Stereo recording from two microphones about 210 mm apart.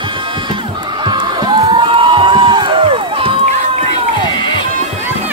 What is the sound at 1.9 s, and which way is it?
Crowd, 25° right (ahead or behind).